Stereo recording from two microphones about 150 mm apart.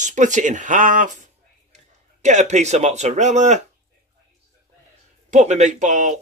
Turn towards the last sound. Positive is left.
turn(degrees=-55)  # may be behind; listen again after turning